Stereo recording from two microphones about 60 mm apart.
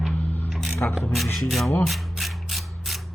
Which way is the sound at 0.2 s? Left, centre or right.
Left.